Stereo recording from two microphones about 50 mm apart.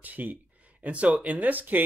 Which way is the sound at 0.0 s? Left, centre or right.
Right.